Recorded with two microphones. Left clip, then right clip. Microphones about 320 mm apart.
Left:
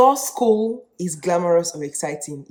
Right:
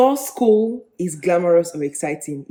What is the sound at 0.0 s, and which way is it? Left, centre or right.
Speech, left.